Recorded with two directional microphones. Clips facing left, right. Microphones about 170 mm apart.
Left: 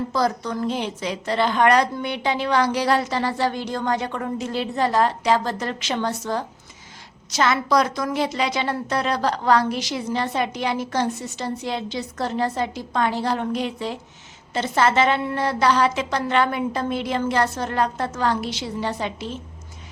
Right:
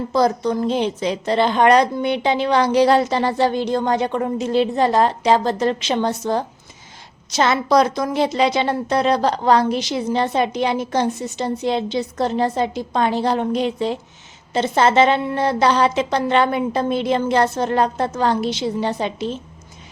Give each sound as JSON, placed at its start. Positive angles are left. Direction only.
{"t": 0.1, "sound": "a woman's voice", "side_deg": -25}